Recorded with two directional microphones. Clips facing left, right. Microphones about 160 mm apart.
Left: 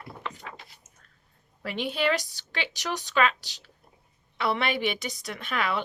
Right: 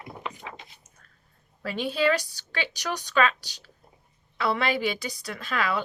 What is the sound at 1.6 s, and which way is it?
A woman's voice, 20° left (ahead or behind).